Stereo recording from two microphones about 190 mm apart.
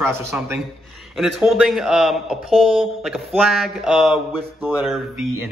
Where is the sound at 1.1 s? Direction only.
Centre (ahead or behind).